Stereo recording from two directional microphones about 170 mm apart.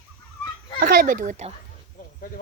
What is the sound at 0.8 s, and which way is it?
Speech, 55° right (ahead or behind).